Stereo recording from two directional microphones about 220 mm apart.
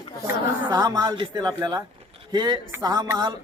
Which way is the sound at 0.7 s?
15° right (ahead or behind).